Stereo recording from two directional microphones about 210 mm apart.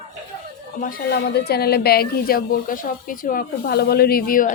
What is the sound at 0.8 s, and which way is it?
A woman's voice, 45° left (ahead or behind).